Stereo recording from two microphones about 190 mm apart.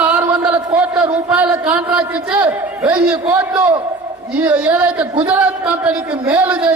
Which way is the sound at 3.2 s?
15° right (ahead or behind).